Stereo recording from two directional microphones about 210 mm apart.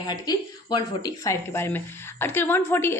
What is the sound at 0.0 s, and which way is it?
Speech, 20° left (ahead or behind).